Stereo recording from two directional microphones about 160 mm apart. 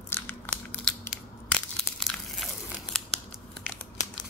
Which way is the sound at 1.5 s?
5° left (ahead or behind).